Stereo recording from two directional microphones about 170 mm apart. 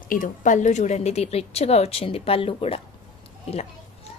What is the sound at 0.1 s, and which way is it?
A woman's voice, 50° left (ahead or behind).